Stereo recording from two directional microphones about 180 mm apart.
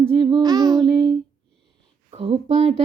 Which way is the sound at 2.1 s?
35° right (ahead or behind).